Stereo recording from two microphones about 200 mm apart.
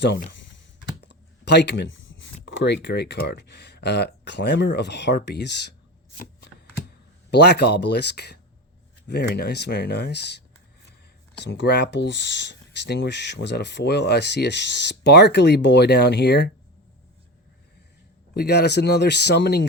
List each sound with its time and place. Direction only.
1.0 s speech: 60° left (ahead or behind)
7.3 s speech: 55° left (ahead or behind)
18.3 s speech: 55° left (ahead or behind)